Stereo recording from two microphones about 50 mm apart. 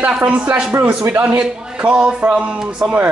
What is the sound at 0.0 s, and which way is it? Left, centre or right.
A man's voice, right.